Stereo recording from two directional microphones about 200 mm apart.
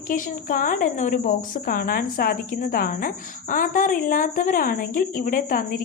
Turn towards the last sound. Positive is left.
turn(degrees=45)  # may be behind; listen again after turning